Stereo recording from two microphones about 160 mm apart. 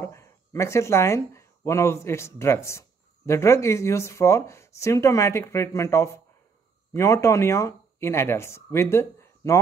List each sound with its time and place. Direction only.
0.0 s speech: 20° left (ahead or behind)